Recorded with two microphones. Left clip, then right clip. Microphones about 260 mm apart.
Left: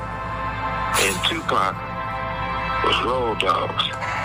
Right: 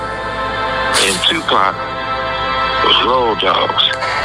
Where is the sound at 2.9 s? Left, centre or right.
Centre.